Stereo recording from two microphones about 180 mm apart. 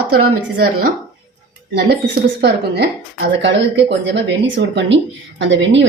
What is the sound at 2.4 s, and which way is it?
A woman's voice, 70° right (ahead or behind).